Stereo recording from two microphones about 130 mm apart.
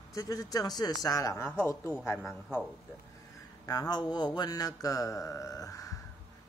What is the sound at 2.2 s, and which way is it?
Speech, 5° right (ahead or behind).